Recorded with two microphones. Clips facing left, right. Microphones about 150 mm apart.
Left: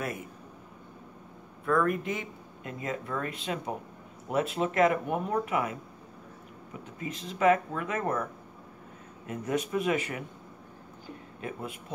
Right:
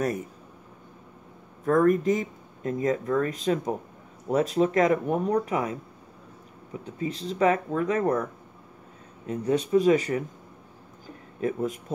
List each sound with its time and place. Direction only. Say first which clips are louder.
0.0 s speech: right 7 dB; 40° right (ahead or behind)
1.6 s speech: right 6 dB; 40° right (ahead or behind)
6.8 s speech: right 7 dB; 35° right (ahead or behind)
9.2 s speech: right 5 dB; 30° right (ahead or behind)
11.4 s speech: right 10 dB; 40° right (ahead or behind)